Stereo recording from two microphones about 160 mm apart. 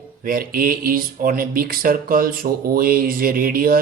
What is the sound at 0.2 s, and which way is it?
Speech, 65° right (ahead or behind).